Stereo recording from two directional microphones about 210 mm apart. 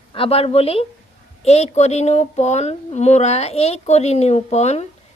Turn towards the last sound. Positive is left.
turn(degrees=30)  # may be behind; listen again after turning